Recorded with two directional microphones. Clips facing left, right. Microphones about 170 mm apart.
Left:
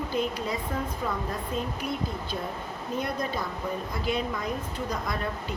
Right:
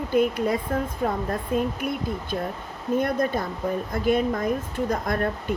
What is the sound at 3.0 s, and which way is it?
A woman's voice, 50° right (ahead or behind).